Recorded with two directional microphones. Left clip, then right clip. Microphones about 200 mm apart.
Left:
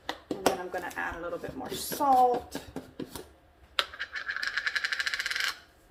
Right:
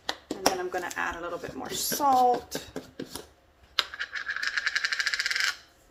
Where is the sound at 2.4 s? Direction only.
25° right (ahead or behind).